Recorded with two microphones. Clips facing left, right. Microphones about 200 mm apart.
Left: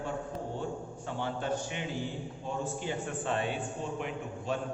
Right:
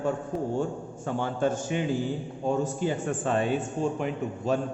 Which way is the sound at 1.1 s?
50° right (ahead or behind).